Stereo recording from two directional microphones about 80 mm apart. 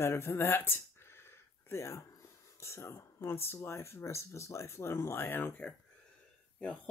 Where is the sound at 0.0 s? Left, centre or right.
Left.